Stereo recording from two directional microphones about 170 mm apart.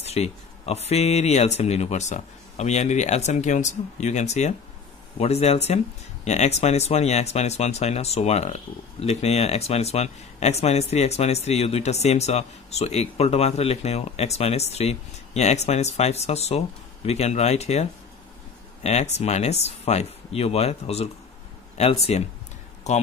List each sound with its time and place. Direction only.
0.0 s speech: 40° left (ahead or behind)